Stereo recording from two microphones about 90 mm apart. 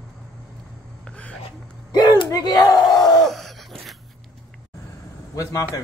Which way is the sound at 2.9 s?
5° left (ahead or behind).